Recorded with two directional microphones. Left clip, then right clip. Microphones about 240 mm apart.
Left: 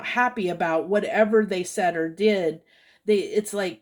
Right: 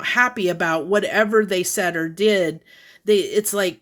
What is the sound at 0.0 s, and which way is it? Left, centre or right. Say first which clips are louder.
Speech: right 5 dB; right.